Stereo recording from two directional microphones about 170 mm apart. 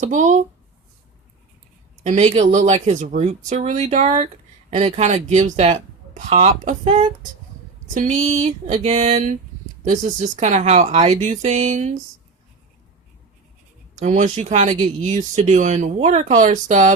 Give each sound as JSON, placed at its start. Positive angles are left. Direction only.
{"t": 0.0, "sound": "speech", "side_deg": -45}
{"t": 2.0, "sound": "speech", "side_deg": -40}
{"t": 7.9, "sound": "speech", "side_deg": -45}
{"t": 14.0, "sound": "speech", "side_deg": -45}